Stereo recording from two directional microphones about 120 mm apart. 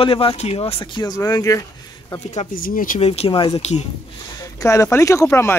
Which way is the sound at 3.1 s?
45° left (ahead or behind).